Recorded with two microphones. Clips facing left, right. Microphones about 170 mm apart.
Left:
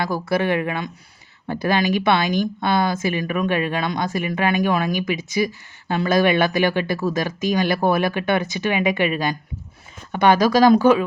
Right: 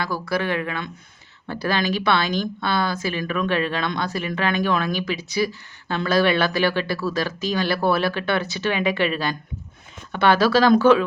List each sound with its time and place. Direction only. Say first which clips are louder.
0.3 s speech: left 4 dB; 20° left (ahead or behind)